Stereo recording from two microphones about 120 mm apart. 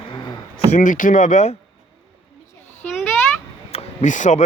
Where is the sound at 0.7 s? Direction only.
90° left.